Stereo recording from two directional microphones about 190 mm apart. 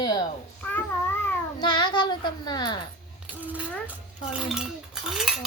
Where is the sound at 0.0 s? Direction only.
20° left (ahead or behind).